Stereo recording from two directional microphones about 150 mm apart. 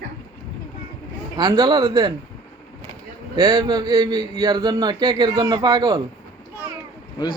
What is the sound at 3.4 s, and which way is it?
A man's voice, 25° right (ahead or behind).